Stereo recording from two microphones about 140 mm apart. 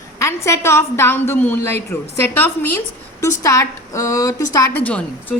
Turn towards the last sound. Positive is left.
turn(degrees=10)  # may be behind; listen again after turning